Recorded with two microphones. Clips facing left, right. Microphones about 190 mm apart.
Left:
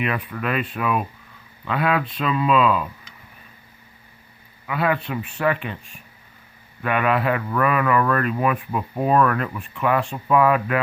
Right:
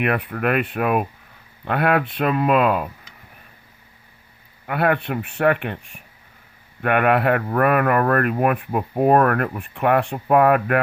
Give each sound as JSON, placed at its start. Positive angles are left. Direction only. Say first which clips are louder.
{"t": 0.0, "sound": "speech", "louder": "right 4 dB", "side_deg": -60}
{"t": 4.6, "sound": "speech", "louder": "right 2 dB", "side_deg": -55}